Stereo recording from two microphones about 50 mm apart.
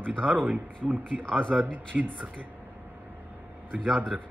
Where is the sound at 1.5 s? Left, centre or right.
Centre.